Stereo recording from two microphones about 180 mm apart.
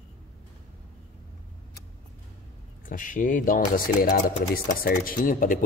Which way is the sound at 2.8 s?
45° left (ahead or behind).